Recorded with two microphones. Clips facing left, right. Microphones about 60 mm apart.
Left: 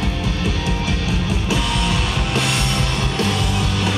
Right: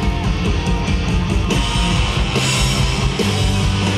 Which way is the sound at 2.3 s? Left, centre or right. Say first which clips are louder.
Right 1 dB; left.